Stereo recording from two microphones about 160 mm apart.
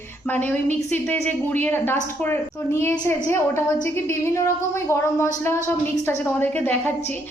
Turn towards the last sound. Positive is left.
turn(degrees=10)  # may be behind; listen again after turning